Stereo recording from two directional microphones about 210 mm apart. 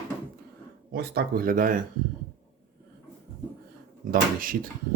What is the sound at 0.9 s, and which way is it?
Speech, 50° right (ahead or behind).